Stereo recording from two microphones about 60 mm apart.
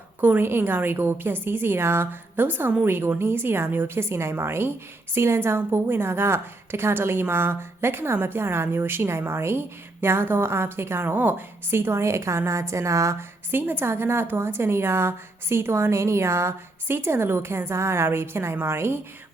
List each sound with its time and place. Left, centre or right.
0.2 s a woman's voice: right
11.7 s a woman's voice: right
13.5 s a woman's voice: right